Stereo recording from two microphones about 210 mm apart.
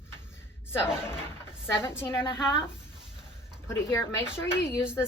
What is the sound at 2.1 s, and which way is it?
Speech, 25° left (ahead or behind).